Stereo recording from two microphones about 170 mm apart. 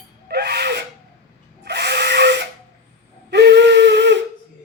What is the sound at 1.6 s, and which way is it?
Tools, 80° right.